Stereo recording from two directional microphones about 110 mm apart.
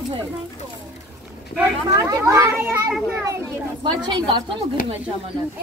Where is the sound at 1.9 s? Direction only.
30° right (ahead or behind).